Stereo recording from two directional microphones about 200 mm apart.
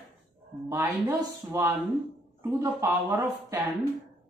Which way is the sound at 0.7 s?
10° right (ahead or behind).